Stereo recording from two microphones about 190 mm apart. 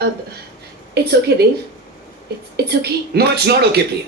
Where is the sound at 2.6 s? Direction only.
60° right (ahead or behind).